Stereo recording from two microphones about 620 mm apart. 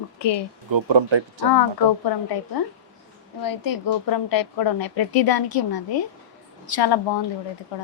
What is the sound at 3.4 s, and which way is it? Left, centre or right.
A woman's voice, left.